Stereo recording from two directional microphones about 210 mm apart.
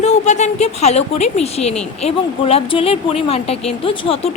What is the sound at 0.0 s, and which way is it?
Speech, 35° left (ahead or behind).